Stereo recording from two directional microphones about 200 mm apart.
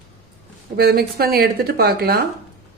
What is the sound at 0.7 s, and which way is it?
Speech, 50° right (ahead or behind).